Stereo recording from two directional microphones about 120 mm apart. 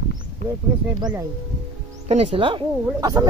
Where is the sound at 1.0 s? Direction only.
35° right (ahead or behind).